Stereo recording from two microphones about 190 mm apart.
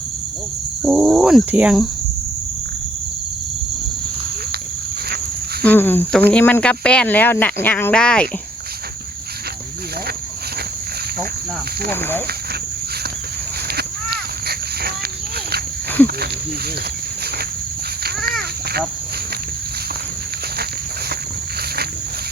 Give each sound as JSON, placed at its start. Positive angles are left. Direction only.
{"t": 0.8, "sound": "speech", "side_deg": 0}
{"t": 5.6, "sound": "speech", "side_deg": 10}
{"t": 11.9, "sound": "speech", "side_deg": 10}
{"t": 13.7, "sound": "crow", "side_deg": -55}
{"t": 18.3, "sound": "caw", "side_deg": -55}